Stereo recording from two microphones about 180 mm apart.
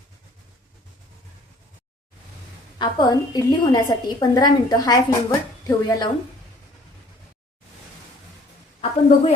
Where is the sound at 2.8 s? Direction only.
20° left (ahead or behind).